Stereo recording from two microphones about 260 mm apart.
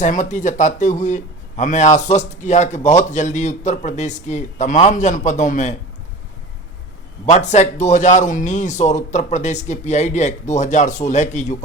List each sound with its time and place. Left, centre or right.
0.0 s speech: left
7.3 s speech: left